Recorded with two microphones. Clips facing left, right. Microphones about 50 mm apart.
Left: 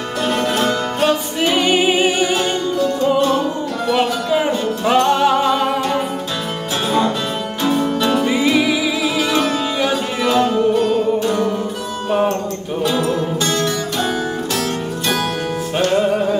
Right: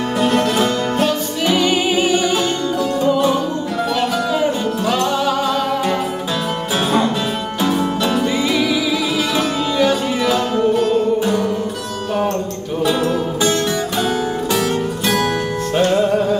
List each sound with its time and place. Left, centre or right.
0.2 s music: centre
1.4 s music: centre
2.3 s music: centre
3.9 s music: centre
7.6 s music: centre
8.3 s music: centre
9.3 s music: centre
12.1 s music: centre
12.8 s music: centre
15.9 s music: centre